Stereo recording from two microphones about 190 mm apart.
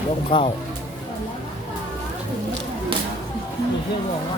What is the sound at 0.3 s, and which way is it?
Speech, 30° left (ahead or behind).